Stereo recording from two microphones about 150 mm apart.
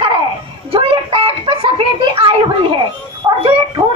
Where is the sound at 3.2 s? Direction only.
25° right (ahead or behind).